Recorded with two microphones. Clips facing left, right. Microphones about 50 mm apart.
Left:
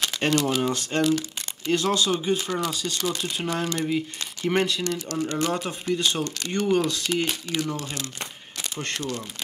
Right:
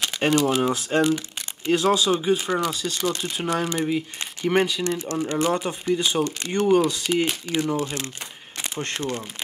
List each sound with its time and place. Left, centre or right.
0.0 s speech: centre
4.8 s speech: right
5.4 s speech: centre
6.7 s speech: centre